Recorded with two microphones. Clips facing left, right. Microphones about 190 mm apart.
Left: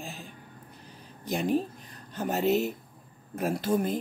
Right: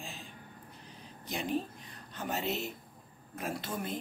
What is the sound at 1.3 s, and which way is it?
Speech, 45° left (ahead or behind).